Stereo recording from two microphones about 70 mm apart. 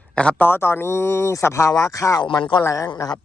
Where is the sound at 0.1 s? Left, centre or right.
Centre.